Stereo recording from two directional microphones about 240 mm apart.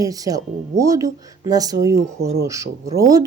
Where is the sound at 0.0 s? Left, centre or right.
Centre.